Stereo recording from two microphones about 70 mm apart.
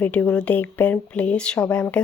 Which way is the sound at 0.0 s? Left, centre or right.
Left.